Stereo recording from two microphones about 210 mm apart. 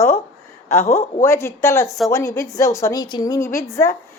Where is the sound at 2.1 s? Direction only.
15° left (ahead or behind).